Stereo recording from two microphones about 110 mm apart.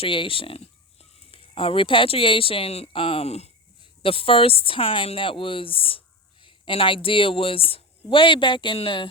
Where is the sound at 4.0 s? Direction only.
55° left (ahead or behind).